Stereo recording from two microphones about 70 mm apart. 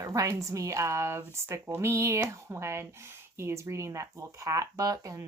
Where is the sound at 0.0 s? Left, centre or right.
Right.